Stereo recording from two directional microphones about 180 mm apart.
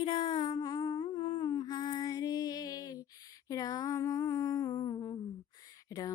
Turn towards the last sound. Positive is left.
turn(degrees=20)  # may be behind; listen again after turning